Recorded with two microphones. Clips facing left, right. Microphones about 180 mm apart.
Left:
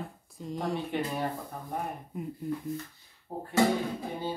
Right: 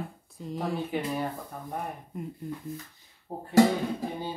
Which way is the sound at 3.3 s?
25° right (ahead or behind).